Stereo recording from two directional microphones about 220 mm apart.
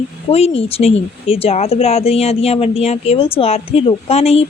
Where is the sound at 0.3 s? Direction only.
25° left (ahead or behind).